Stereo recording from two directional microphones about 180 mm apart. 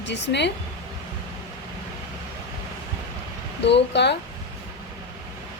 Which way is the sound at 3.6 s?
75° left (ahead or behind).